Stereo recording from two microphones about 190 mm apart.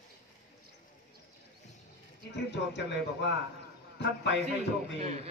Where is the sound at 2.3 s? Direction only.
65° left (ahead or behind).